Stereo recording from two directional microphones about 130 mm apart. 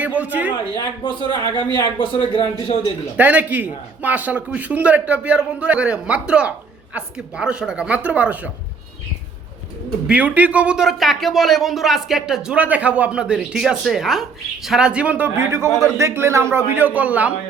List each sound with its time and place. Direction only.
0.0 s a man's voice: 10° right (ahead or behind)
0.8 s speech: 35° left (ahead or behind)
3.2 s a man's voice: 10° right (ahead or behind)
10.1 s a man's voice: 10° right (ahead or behind)